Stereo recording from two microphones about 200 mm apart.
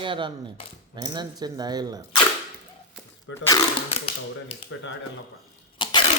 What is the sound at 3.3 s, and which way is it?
Speech, 15° left (ahead or behind).